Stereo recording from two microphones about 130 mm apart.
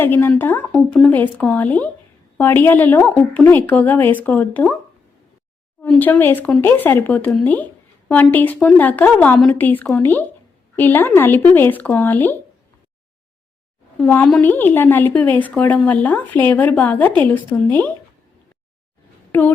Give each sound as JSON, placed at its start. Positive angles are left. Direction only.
{"t": 0.0, "sound": "speech", "side_deg": 15}
{"t": 5.9, "sound": "speech", "side_deg": 15}
{"t": 14.0, "sound": "speech", "side_deg": 15}
{"t": 19.3, "sound": "speech", "side_deg": 15}